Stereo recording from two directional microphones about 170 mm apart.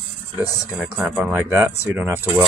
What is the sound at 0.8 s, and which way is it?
Speech, 10° right (ahead or behind).